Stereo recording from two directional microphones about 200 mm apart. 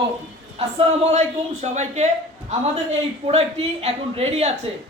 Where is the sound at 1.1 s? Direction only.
35° right (ahead or behind).